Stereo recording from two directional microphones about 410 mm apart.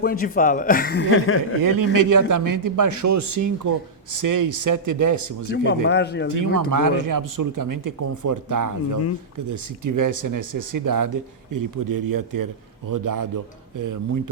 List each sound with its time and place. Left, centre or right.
0.0 s speech: left
1.6 s a man's voice: right
5.5 s speech: left
6.2 s a man's voice: right